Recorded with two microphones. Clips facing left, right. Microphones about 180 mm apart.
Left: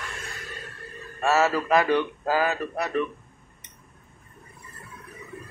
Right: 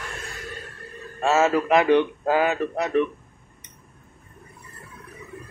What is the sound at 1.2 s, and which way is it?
A man's voice, 20° right (ahead or behind).